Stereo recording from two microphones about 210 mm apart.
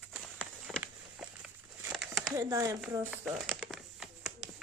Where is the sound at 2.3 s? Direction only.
15° right (ahead or behind).